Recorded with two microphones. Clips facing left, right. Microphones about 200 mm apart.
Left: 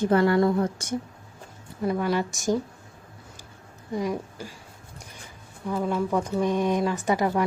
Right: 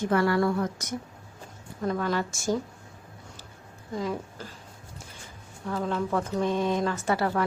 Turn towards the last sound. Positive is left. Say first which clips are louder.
# left 3 dB
turn(degrees=15)  # may be behind; listen again after turning